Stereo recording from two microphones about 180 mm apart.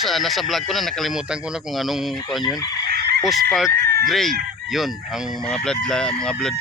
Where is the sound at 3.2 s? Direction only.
Centre (ahead or behind).